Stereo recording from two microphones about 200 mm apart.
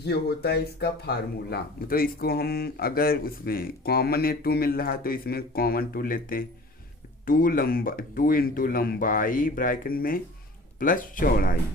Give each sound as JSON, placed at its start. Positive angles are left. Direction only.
{"t": 0.0, "sound": "speech", "side_deg": 55}